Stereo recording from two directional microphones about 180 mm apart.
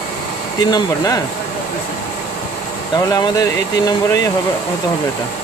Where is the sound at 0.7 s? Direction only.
20° left (ahead or behind).